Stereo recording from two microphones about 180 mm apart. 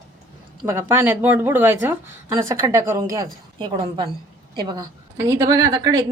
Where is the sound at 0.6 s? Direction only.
15° right (ahead or behind).